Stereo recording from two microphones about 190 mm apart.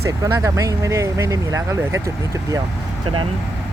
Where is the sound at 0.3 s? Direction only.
15° right (ahead or behind).